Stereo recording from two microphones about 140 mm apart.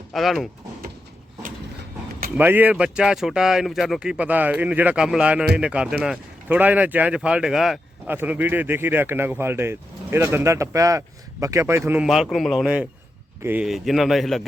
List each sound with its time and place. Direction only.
0.1 s speech: centre (ahead or behind)
2.3 s speech: 15° right (ahead or behind)
8.0 s speech: 15° right (ahead or behind)
12.0 s speech: 5° right (ahead or behind)
13.7 s speech: centre (ahead or behind)